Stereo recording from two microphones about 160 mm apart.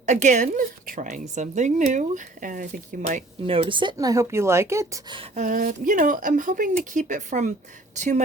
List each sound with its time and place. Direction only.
0.0 s a woman's voice: 50° right (ahead or behind)
3.4 s speech: 35° right (ahead or behind); by 4.9 s 15° right (ahead or behind)
5.3 s a woman's voice: 50° right (ahead or behind)